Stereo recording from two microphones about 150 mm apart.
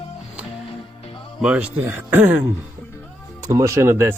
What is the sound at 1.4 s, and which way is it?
Speech, 5° right (ahead or behind).